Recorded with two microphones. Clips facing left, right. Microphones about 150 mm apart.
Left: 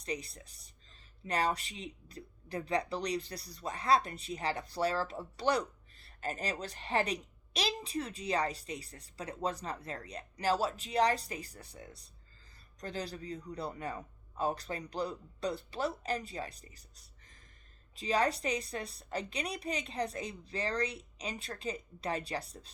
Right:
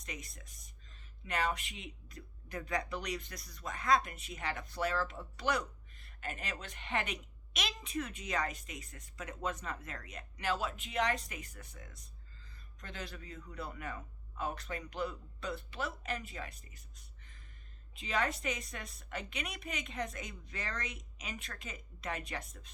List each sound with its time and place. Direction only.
0.0 s speech: 30° left (ahead or behind)